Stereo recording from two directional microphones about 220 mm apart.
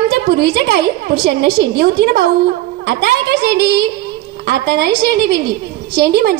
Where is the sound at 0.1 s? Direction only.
45° right (ahead or behind).